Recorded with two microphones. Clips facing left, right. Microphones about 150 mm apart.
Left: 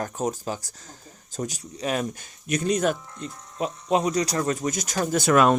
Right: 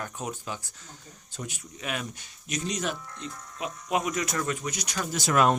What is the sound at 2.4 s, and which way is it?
Speech, 55° left (ahead or behind).